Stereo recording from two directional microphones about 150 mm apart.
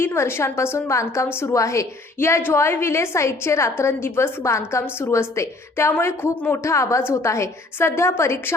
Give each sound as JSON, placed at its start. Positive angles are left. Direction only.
{"t": 0.0, "sound": "a woman's voice", "side_deg": 20}